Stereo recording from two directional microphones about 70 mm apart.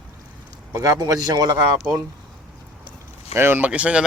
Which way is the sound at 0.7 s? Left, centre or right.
Right.